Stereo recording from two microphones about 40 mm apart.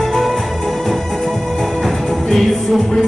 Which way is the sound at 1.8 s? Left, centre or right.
Centre.